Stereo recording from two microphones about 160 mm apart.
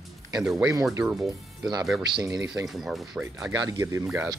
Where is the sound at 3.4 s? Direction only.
20° right (ahead or behind).